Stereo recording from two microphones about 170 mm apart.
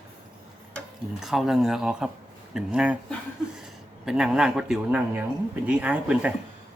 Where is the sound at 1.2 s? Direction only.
Centre (ahead or behind).